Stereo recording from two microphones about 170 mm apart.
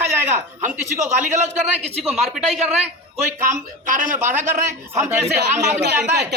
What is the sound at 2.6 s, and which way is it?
Speech, 45° right (ahead or behind).